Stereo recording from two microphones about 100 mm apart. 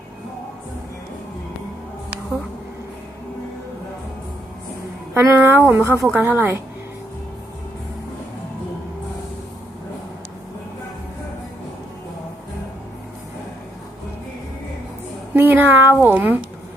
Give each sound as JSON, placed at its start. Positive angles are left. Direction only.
{"t": 5.1, "sound": "speech", "side_deg": -20}
{"t": 15.3, "sound": "speech", "side_deg": -20}